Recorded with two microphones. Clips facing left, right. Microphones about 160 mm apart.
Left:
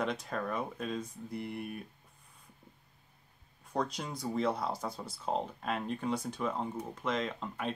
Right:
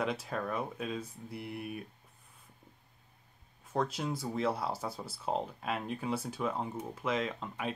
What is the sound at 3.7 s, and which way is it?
Speech, 5° right (ahead or behind).